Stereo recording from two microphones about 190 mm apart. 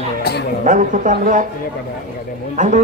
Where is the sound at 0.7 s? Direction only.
45° right (ahead or behind).